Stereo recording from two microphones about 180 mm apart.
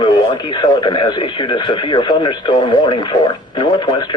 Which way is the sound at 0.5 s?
25° left (ahead or behind).